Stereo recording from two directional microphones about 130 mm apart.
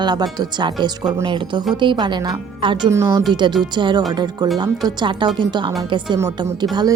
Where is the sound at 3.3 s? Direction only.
35° right (ahead or behind).